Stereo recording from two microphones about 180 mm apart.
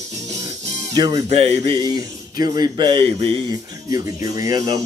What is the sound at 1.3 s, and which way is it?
Music, 35° right (ahead or behind).